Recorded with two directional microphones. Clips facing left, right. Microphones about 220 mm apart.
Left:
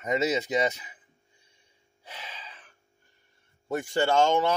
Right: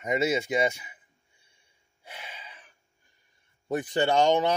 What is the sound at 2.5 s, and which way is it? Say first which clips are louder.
Cough: left 1 dB; 15° right (ahead or behind).